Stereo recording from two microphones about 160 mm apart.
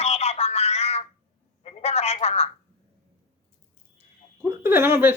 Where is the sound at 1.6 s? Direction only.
40° left (ahead or behind).